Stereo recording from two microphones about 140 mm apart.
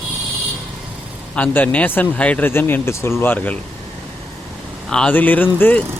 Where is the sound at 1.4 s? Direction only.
10° left (ahead or behind).